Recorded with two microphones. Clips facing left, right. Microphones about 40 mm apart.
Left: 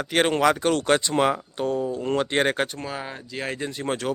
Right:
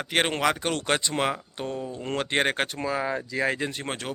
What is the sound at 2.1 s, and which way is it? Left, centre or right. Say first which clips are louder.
Speech: left 2 dB; centre.